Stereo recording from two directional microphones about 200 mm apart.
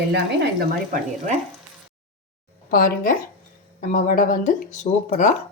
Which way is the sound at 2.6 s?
45° left (ahead or behind).